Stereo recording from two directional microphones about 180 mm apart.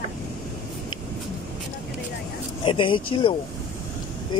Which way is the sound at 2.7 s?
25° left (ahead or behind).